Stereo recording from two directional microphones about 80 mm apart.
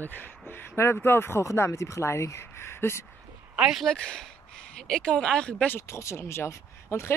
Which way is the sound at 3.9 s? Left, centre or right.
Centre.